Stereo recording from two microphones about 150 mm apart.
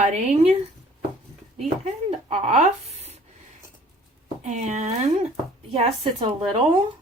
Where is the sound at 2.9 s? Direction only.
45° right (ahead or behind).